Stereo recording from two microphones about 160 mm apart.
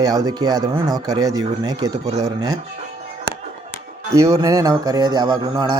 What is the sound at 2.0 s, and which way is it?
Speech, 45° right (ahead or behind).